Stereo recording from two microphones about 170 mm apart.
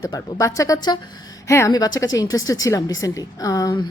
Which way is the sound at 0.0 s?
25° left (ahead or behind).